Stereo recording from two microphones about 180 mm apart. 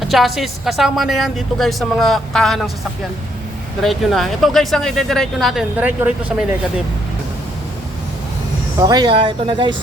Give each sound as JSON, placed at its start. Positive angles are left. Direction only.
{"t": 0.1, "sound": "speech", "side_deg": 0}
{"t": 3.8, "sound": "speech", "side_deg": 0}
{"t": 8.8, "sound": "speech", "side_deg": -20}